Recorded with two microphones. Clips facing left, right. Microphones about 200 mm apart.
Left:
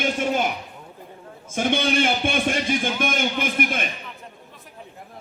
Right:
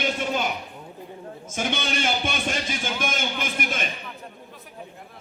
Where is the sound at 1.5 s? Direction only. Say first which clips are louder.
Left 6 dB; 55° left (ahead or behind).